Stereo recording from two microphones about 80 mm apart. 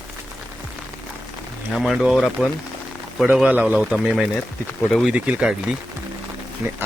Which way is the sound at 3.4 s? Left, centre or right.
Centre.